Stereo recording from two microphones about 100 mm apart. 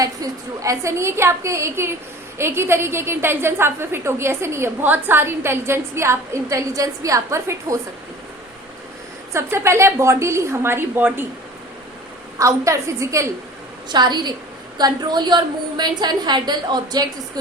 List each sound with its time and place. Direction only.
0.0 s a woman's voice: 35° right (ahead or behind)
9.3 s a woman's voice: 25° right (ahead or behind)
12.4 s a woman's voice: 30° right (ahead or behind)
13.9 s a woman's voice: 45° right (ahead or behind)